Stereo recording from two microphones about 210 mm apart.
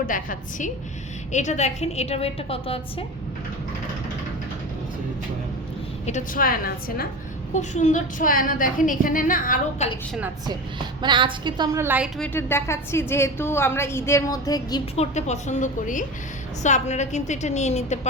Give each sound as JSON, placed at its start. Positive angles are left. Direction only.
{"t": 0.0, "sound": "a woman's voice", "side_deg": 40}
{"t": 6.1, "sound": "a woman's voice", "side_deg": 40}
{"t": 7.5, "sound": "a woman's voice", "side_deg": 35}
{"t": 10.4, "sound": "a woman's voice", "side_deg": -20}
{"t": 12.3, "sound": "a woman's voice", "side_deg": 10}
{"t": 14.9, "sound": "a woman's voice", "side_deg": 30}